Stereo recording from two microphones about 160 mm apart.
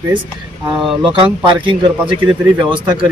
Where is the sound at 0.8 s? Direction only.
Centre (ahead or behind).